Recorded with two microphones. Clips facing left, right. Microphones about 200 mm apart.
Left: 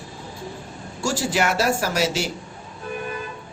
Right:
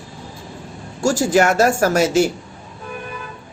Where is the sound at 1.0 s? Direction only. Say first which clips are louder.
Right 7 dB; 45° right (ahead or behind).